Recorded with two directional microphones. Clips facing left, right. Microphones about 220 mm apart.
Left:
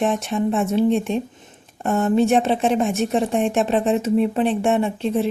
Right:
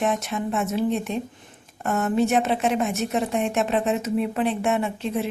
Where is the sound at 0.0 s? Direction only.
30° left (ahead or behind).